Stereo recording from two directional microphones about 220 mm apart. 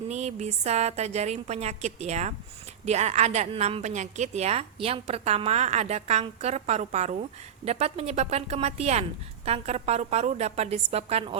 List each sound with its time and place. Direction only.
0.1 s a woman's voice: 30° right (ahead or behind)